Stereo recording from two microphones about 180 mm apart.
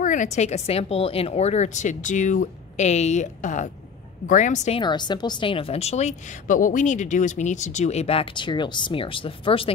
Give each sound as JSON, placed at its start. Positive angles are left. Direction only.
{"t": 0.0, "sound": "a woman's voice", "side_deg": 45}
{"t": 4.7, "sound": "a woman's voice", "side_deg": 25}